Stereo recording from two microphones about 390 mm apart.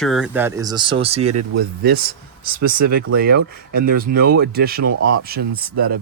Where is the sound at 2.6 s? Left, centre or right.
Right.